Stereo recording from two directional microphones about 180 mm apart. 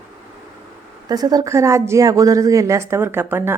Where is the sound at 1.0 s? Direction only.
20° right (ahead or behind).